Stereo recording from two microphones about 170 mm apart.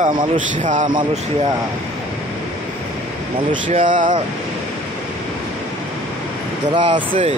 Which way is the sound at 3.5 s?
30° right (ahead or behind).